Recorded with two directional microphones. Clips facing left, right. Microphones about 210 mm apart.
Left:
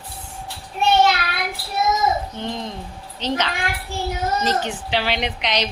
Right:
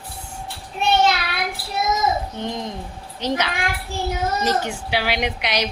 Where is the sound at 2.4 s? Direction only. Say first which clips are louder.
Right 1 dB; 15° right (ahead or behind).